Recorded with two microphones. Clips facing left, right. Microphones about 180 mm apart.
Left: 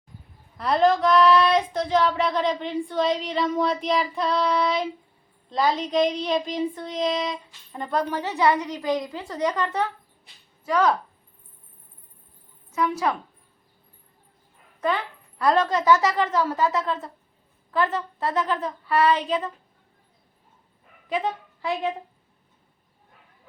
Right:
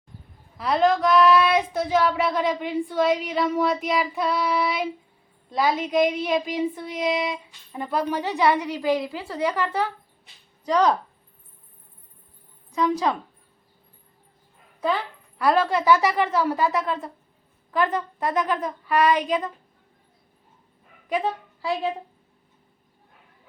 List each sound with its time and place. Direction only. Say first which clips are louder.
0.5 s child singing: left 1 dB; centre (ahead or behind)
10.7 s a woman's voice: right 1 dB; 20° right (ahead or behind)
12.7 s child singing: right 2 dB; 15° right (ahead or behind)
14.8 s child singing: even; 10° right (ahead or behind)